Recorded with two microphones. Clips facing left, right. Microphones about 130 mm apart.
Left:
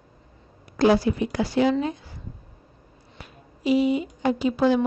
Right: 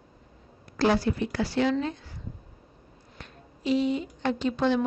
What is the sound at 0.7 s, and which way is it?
A woman's voice, 15° left (ahead or behind).